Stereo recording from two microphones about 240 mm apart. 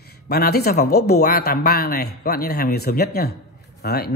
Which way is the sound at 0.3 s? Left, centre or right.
Left.